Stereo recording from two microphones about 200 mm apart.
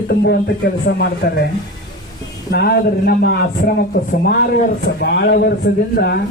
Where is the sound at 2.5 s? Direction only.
55° left (ahead or behind).